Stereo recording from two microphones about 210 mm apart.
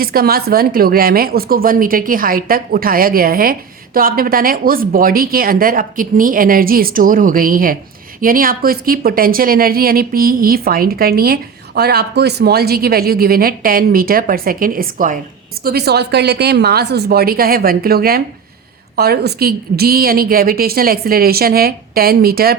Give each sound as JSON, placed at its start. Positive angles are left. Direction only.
{"t": 0.0, "sound": "a woman's voice", "side_deg": -45}